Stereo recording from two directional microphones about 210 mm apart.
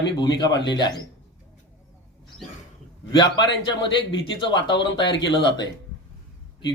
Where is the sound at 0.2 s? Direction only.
20° left (ahead or behind).